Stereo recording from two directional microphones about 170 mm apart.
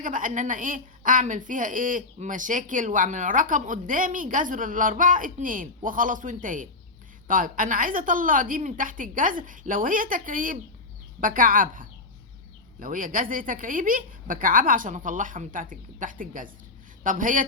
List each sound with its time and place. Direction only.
0.0 s a woman's voice: 50° right (ahead or behind)